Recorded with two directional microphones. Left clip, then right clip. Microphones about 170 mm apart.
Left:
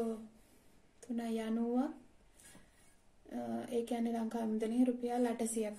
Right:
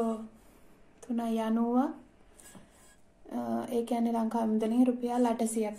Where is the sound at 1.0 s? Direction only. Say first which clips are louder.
Right 7 dB; 10° left (ahead or behind).